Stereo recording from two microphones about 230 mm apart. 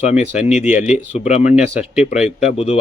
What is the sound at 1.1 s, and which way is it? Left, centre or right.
Speech, left.